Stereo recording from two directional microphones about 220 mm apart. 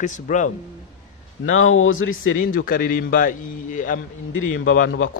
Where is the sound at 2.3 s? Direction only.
40° left (ahead or behind).